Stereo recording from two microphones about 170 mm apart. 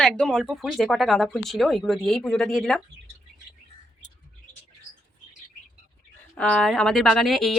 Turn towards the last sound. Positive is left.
turn(degrees=0)  # may be behind; listen again after turning